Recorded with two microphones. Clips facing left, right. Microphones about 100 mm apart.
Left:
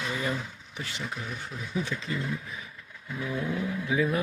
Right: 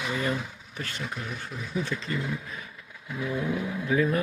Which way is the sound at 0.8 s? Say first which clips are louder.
Right 1 dB; 15° left (ahead or behind).